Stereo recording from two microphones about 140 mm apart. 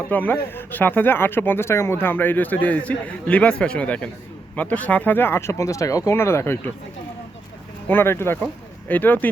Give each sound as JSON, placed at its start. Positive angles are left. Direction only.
{"t": 0.1, "sound": "speech", "side_deg": 10}
{"t": 7.9, "sound": "speech", "side_deg": 15}